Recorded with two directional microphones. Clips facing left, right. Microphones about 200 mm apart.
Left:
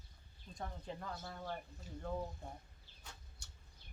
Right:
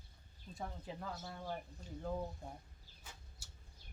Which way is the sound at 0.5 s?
5° right (ahead or behind).